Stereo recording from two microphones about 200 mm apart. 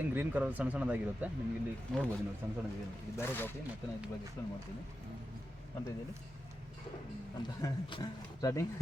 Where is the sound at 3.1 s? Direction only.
10° left (ahead or behind).